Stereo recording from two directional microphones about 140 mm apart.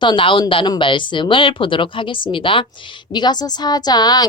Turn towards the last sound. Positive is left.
turn(degrees=30)  # may be behind; listen again after turning